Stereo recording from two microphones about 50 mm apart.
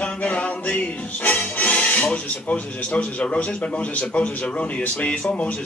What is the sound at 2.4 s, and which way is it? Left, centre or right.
A man's voice, left.